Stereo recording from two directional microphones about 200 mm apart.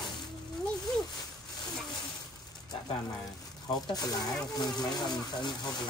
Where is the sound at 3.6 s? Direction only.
20° left (ahead or behind).